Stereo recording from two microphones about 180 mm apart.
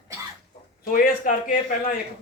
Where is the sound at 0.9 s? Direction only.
50° left (ahead or behind).